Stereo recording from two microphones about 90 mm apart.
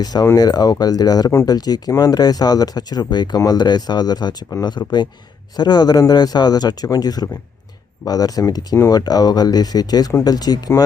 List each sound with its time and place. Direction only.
0.0 s speech: 45° left (ahead or behind)